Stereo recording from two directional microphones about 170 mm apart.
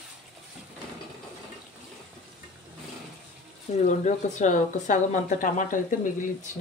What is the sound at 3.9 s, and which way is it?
Speech, 45° left (ahead or behind).